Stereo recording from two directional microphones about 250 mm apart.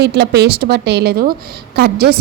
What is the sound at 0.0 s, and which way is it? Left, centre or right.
A woman's voice, right.